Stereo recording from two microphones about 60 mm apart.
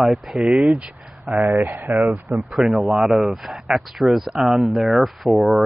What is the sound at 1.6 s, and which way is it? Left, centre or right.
Speech, right.